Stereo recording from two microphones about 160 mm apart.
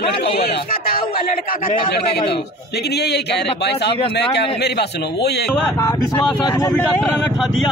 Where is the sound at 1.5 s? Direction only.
60° left (ahead or behind).